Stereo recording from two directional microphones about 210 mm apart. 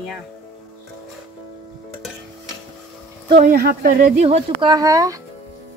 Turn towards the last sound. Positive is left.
turn(degrees=-15)  # may be behind; listen again after turning